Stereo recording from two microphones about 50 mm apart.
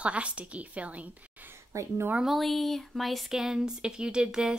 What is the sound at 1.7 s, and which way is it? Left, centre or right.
Speech, right.